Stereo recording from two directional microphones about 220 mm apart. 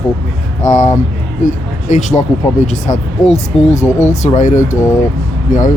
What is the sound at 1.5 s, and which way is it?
Speech, 35° left (ahead or behind).